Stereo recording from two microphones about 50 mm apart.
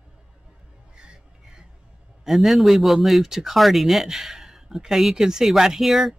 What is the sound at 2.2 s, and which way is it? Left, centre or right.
Speech, centre.